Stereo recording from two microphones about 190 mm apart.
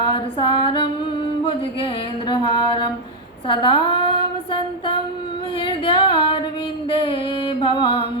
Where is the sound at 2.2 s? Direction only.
25° left (ahead or behind).